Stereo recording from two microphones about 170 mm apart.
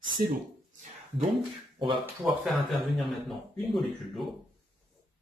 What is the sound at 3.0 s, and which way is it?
Speech, centre (ahead or behind).